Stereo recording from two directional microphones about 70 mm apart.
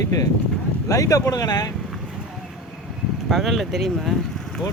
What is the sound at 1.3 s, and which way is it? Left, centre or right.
Speech, left.